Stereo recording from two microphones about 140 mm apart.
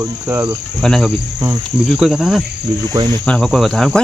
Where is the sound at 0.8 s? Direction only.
Centre (ahead or behind).